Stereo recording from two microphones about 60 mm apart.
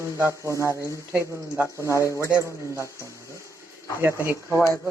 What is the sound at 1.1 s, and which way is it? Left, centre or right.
Speech, right.